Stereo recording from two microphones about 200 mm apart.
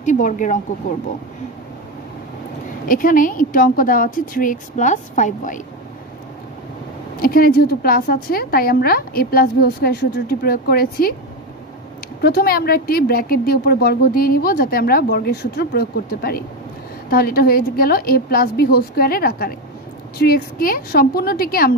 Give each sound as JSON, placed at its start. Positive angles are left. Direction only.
{"t": 0.0, "sound": "speech", "side_deg": 40}
{"t": 2.9, "sound": "speech", "side_deg": 45}
{"t": 7.2, "sound": "speech", "side_deg": 45}
{"t": 12.2, "sound": "speech", "side_deg": 50}